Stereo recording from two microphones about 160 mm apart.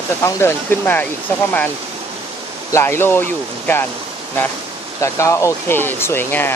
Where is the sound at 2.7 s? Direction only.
15° left (ahead or behind).